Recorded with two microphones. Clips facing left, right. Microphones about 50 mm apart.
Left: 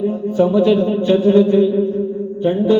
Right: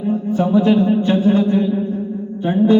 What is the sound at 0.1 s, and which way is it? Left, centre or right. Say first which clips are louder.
A man's voice: left 1 dB; right.